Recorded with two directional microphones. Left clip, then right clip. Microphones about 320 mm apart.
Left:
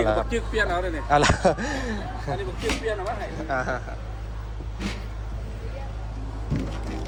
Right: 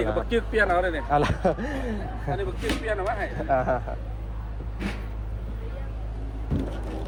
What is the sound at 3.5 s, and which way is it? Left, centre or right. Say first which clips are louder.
Speech: right 3 dB; centre.